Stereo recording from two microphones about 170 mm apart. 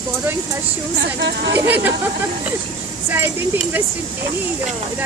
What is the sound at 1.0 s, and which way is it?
Speech, 85° right.